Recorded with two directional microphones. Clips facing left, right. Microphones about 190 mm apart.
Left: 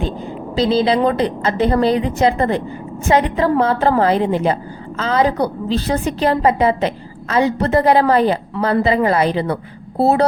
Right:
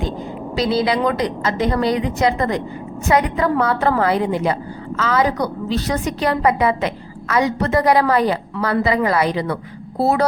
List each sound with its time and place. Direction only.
0.5 s a woman's voice: 30° left (ahead or behind)